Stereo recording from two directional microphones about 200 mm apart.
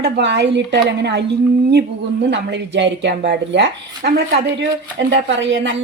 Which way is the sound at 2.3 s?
60° right (ahead or behind).